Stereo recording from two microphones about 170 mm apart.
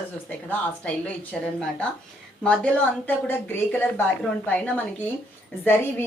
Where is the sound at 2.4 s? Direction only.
10° left (ahead or behind).